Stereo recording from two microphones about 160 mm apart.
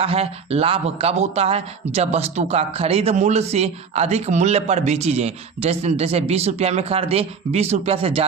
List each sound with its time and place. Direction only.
0.0 s speech: 40° right (ahead or behind)